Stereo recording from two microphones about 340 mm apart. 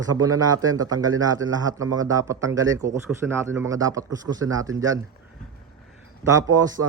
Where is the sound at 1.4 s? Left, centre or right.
Right.